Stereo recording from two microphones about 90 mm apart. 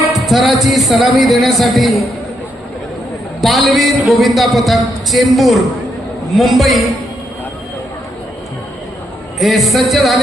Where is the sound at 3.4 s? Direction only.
Centre (ahead or behind).